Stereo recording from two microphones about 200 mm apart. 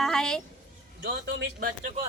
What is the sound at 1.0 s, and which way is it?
Speech, 55° right (ahead or behind).